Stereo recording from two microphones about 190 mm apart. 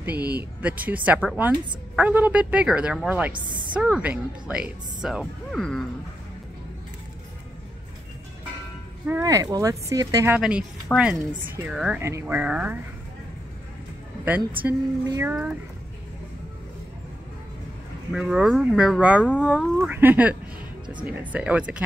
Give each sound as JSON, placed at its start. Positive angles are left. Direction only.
{"t": 0.6, "sound": "a woman's voice", "side_deg": -10}
{"t": 9.0, "sound": "a woman's voice", "side_deg": -15}
{"t": 10.4, "sound": "speech", "side_deg": -5}
{"t": 12.0, "sound": "a woman's voice", "side_deg": -15}
{"t": 14.2, "sound": "a woman's voice", "side_deg": -10}
{"t": 18.1, "sound": "a woman's voice", "side_deg": -5}